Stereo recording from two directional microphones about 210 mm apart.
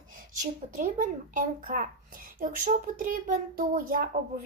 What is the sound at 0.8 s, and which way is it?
A woman's voice, 35° right (ahead or behind).